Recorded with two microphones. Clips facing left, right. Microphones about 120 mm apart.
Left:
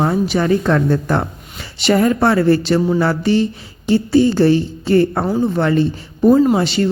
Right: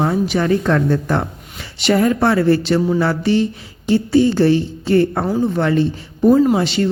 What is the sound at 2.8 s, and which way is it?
Music, 30° left (ahead or behind).